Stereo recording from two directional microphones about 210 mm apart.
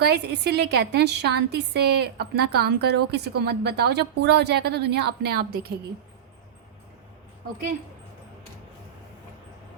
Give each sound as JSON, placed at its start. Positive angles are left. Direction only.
{"t": 0.0, "sound": "a woman's voice", "side_deg": -50}